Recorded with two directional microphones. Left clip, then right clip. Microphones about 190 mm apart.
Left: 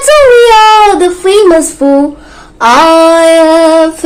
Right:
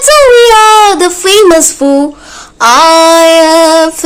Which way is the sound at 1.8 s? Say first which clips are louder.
Left 1 dB; 30° right (ahead or behind).